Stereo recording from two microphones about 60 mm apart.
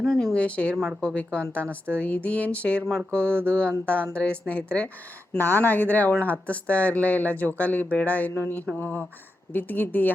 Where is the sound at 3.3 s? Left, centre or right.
Right.